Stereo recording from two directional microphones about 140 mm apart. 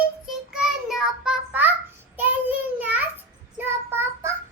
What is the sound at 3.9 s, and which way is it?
Child singing, 15° right (ahead or behind).